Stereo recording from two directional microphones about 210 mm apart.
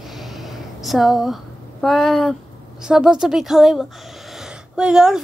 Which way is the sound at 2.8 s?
5° right (ahead or behind).